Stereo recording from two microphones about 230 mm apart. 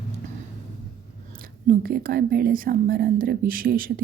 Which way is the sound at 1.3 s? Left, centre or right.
Right.